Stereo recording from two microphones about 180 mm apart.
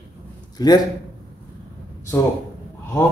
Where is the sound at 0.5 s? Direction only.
20° left (ahead or behind).